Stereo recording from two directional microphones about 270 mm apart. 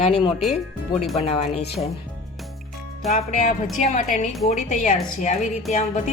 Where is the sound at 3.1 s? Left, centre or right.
Left.